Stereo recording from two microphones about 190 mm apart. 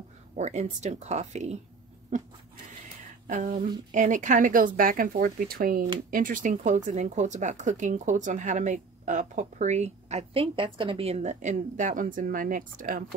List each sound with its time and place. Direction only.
0.4 s speech: 35° right (ahead or behind)
3.3 s speech: 40° right (ahead or behind)